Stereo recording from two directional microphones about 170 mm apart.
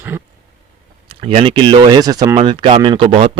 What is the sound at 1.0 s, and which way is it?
Speech, 30° right (ahead or behind).